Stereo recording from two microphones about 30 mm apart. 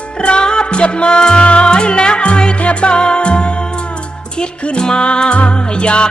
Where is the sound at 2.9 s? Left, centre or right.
Left.